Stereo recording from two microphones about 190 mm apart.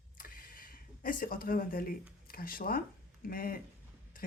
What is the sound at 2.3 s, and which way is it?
Speech, 50° left (ahead or behind).